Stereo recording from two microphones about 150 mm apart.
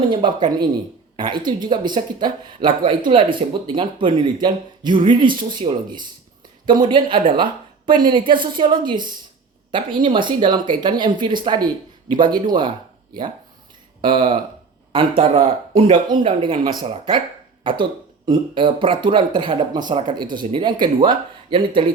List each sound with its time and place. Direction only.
0.1 s speech: 30° right (ahead or behind)
14.0 s speech: 35° right (ahead or behind)